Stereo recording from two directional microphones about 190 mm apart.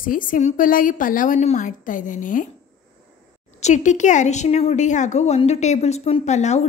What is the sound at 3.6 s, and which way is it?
A woman's voice, 40° left (ahead or behind).